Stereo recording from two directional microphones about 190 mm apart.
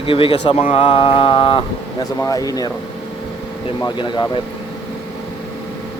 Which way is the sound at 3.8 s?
25° left (ahead or behind).